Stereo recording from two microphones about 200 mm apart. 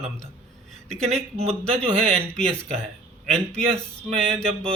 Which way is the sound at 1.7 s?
5° left (ahead or behind).